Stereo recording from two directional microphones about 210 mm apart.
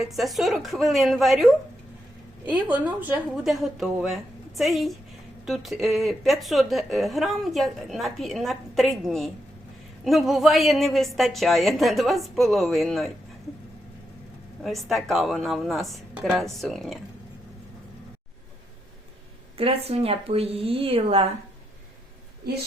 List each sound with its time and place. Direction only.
0.0 s a woman's voice: centre (ahead or behind)
2.5 s a woman's voice: 5° right (ahead or behind)
14.6 s a woman's voice: centre (ahead or behind)
19.5 s speech: 30° right (ahead or behind)